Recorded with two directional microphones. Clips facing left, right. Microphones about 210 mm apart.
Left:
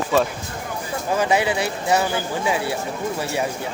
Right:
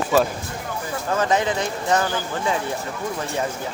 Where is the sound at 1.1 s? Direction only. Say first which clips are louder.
Left 1 dB; 10° left (ahead or behind).